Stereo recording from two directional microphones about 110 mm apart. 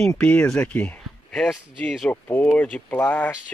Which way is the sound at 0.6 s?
10° left (ahead or behind).